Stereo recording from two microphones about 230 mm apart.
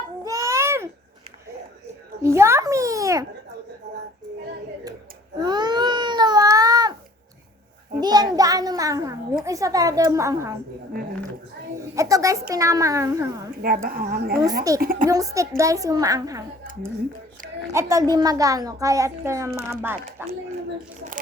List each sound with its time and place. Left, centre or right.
0.3 s babbling: centre
2.2 s a sound: centre
5.4 s baby cry: centre
8.0 s a sound: centre
9.3 s a woman's voice: centre
11.9 s a woman's voice: centre
13.8 s speech: right
15.1 s a woman's voice: centre
17.7 s a woman's voice: centre